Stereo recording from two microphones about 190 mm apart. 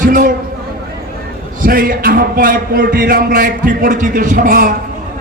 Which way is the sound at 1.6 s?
50° right (ahead or behind).